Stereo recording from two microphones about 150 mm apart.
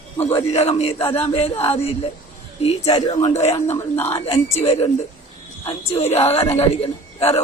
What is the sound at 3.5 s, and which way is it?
Speech, 15° left (ahead or behind).